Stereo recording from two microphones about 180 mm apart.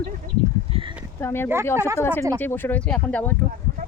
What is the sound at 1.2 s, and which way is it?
Speech, 10° left (ahead or behind).